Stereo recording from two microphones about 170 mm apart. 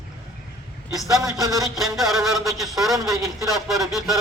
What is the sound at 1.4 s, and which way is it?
Speech, 20° right (ahead or behind).